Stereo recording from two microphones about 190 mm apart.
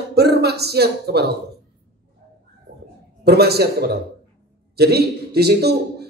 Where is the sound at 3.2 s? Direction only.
55° right (ahead or behind).